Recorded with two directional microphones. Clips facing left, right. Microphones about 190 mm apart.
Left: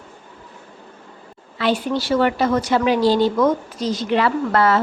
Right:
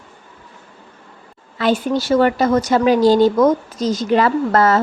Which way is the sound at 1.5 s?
45° right (ahead or behind).